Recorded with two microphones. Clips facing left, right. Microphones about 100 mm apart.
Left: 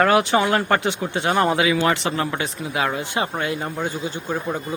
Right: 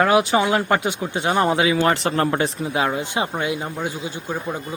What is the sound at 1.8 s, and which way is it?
Speech, 40° right (ahead or behind).